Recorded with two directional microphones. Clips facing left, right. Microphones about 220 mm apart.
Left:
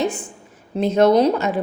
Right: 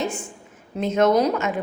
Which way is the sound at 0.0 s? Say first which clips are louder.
Left 4 dB; 35° left (ahead or behind).